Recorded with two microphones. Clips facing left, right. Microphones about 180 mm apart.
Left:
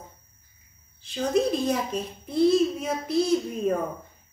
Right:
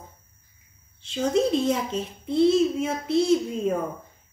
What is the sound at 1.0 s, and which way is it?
A woman's voice, 25° right (ahead or behind).